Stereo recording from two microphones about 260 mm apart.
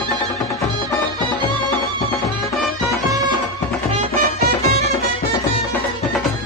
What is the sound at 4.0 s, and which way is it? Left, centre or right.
Music, right.